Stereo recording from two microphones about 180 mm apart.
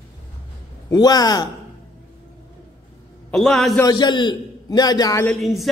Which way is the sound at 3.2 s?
5° left (ahead or behind).